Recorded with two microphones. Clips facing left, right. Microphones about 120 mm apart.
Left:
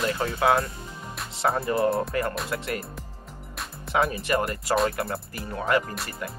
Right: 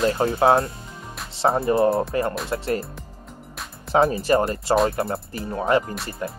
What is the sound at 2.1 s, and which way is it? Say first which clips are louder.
Speech: right 4 dB; 25° right (ahead or behind).